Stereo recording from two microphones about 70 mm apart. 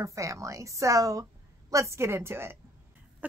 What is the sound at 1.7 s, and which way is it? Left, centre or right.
Speech, right.